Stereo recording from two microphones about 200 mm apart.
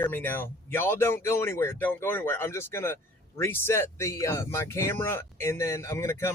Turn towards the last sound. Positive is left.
turn(degrees=15)  # may be behind; listen again after turning